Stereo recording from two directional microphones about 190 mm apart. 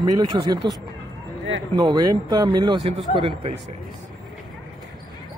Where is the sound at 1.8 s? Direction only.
20° right (ahead or behind).